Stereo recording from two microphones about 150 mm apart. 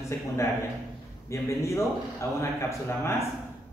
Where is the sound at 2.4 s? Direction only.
20° left (ahead or behind).